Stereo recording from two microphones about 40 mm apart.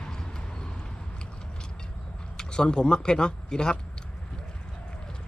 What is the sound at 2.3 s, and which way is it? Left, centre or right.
Speech, left.